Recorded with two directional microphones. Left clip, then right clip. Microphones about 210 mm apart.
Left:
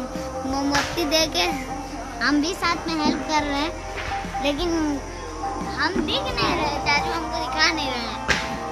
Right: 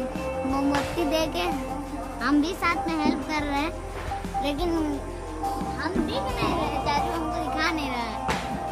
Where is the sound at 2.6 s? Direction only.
20° left (ahead or behind).